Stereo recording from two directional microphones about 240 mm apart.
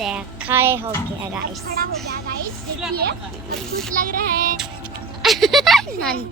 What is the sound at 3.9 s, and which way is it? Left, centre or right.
Child singing, right.